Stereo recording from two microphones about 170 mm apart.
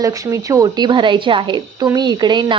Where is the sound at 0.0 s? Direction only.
20° right (ahead or behind).